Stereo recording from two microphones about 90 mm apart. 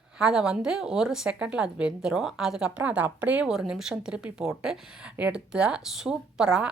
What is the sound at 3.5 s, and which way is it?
Speech, 5° right (ahead or behind).